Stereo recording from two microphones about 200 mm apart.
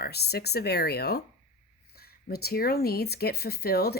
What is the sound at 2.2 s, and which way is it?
A woman's voice, 50° left (ahead or behind).